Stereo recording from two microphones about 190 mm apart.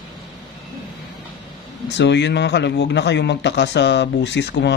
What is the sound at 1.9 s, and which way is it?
Speech, 65° left (ahead or behind).